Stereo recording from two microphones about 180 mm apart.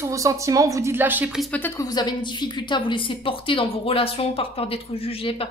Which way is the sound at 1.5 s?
10° left (ahead or behind).